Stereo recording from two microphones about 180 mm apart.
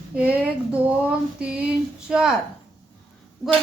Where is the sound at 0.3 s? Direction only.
5° right (ahead or behind).